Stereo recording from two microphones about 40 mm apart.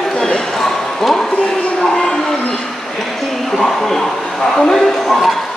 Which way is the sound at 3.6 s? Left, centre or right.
Centre.